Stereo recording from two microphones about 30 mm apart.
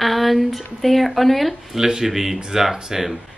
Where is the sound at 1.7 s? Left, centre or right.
Centre.